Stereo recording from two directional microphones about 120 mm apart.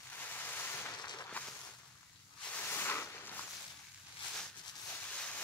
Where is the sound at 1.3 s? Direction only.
10° left (ahead or behind).